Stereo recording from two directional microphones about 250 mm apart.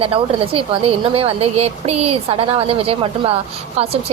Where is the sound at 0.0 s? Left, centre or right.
Right.